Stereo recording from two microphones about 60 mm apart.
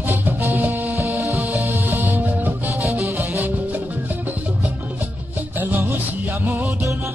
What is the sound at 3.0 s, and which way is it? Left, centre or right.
Music, right.